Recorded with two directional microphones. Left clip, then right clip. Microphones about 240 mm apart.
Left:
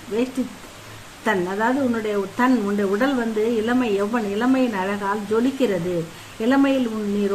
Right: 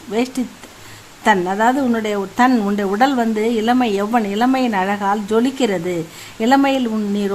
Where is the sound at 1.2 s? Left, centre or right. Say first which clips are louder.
Right 6 dB; right.